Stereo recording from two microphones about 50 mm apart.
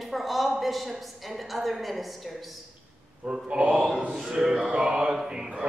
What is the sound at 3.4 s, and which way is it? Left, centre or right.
Speech, right.